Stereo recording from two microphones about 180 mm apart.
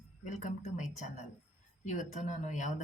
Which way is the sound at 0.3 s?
40° left (ahead or behind).